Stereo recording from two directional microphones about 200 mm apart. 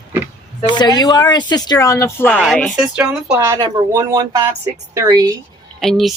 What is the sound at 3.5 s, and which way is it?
Speech, 20° right (ahead or behind).